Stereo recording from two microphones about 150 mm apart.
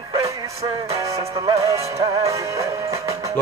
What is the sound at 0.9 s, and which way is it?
Music, 20° right (ahead or behind).